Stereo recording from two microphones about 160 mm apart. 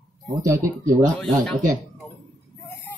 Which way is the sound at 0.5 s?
15° right (ahead or behind).